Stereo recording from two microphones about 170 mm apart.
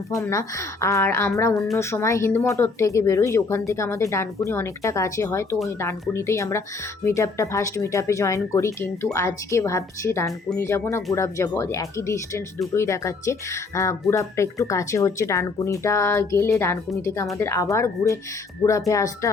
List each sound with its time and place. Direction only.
0.2 s speech: 20° left (ahead or behind)